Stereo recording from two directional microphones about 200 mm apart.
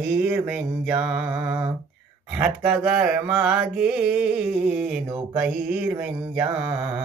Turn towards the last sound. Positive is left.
turn(degrees=-5)  # may be behind; listen again after turning